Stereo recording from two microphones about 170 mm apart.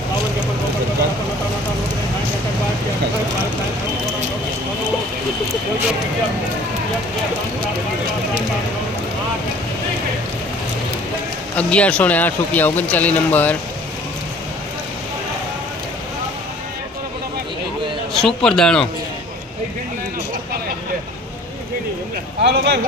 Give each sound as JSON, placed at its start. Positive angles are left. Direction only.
{"t": 11.5, "sound": "speech", "side_deg": 5}
{"t": 18.1, "sound": "a man's voice", "side_deg": 5}
{"t": 22.4, "sound": "speech", "side_deg": -80}